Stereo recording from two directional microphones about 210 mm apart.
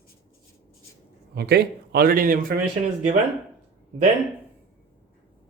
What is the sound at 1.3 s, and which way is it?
A man's voice, 50° right (ahead or behind).